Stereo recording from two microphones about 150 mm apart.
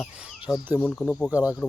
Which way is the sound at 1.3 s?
10° right (ahead or behind).